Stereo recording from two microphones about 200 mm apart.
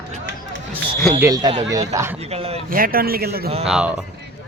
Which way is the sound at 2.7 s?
45° right (ahead or behind).